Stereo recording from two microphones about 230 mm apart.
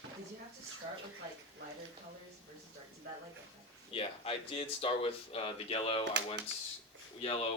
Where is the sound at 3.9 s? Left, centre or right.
Left.